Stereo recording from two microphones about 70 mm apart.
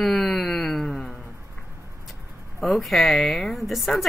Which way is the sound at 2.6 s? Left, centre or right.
Centre.